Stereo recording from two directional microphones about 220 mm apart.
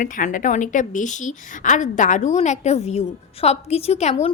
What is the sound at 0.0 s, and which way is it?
A woman's voice, 35° left (ahead or behind).